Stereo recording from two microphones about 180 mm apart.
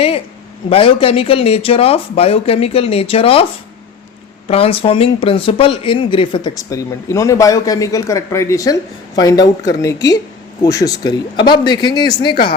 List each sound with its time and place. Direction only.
0.7 s speech: 30° left (ahead or behind)
4.4 s speech: 30° left (ahead or behind)